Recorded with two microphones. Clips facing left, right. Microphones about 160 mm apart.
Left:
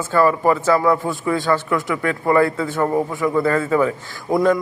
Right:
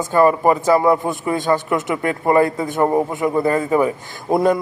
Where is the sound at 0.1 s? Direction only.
20° right (ahead or behind).